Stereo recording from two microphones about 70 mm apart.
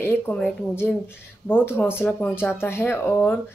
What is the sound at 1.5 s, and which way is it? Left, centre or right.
Speech, left.